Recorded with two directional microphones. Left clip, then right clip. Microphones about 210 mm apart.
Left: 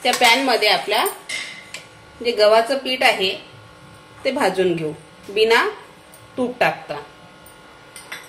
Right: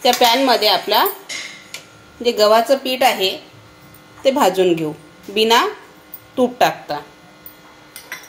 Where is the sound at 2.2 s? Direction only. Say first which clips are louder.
Right 1 dB; 30° right (ahead or behind).